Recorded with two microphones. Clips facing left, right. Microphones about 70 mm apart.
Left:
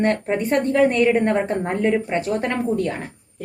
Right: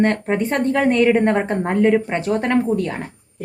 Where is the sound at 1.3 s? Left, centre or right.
Right.